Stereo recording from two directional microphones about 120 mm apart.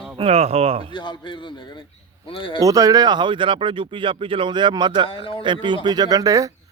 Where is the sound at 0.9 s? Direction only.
40° left (ahead or behind).